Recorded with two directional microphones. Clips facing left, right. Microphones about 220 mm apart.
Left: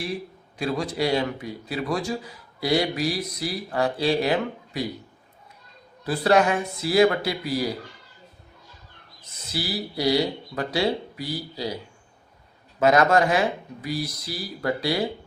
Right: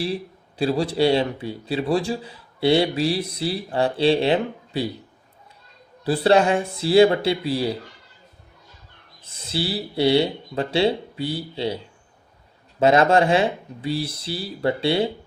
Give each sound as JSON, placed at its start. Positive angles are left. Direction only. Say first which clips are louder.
{"t": 0.6, "sound": "a man's voice", "louder": "right 5 dB", "side_deg": -30}
{"t": 6.1, "sound": "a man's voice", "louder": "right 3 dB", "side_deg": -30}
{"t": 9.2, "sound": "a man's voice", "louder": "right 4 dB", "side_deg": -30}
{"t": 12.8, "sound": "a man's voice", "louder": "right 2 dB", "side_deg": -30}